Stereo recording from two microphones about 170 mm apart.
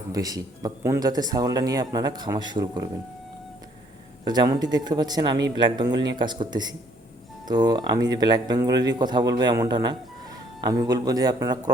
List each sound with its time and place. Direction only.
0.1 s speech: 20° right (ahead or behind)
4.2 s speech: 25° right (ahead or behind)